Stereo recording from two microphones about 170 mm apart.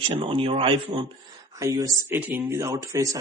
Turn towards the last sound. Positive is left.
turn(degrees=-20)  # may be behind; listen again after turning